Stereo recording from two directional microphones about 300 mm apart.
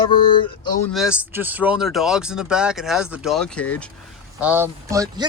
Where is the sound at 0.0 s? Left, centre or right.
Centre.